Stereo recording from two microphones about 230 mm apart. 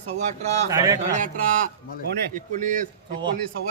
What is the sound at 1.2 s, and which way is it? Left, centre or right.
A man's voice, right.